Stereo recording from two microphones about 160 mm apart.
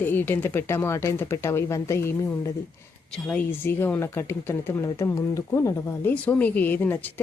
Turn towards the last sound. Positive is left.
turn(degrees=10)  # may be behind; listen again after turning